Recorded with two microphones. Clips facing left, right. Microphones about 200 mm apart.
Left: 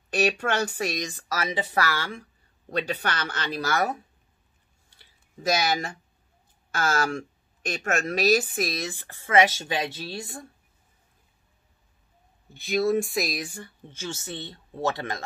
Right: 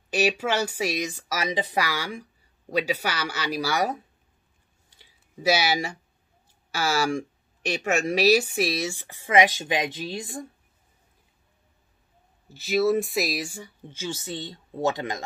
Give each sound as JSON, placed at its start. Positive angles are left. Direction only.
{"t": 0.1, "sound": "speech", "side_deg": -5}
{"t": 4.9, "sound": "a sound", "side_deg": -10}
{"t": 6.7, "sound": "speech", "side_deg": -10}
{"t": 12.4, "sound": "speech", "side_deg": -5}
{"t": 13.7, "sound": "speech", "side_deg": -15}